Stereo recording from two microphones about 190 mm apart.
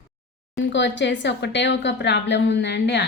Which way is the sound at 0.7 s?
70° left (ahead or behind).